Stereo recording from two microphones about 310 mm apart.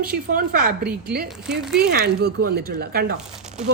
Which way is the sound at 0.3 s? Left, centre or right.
Right.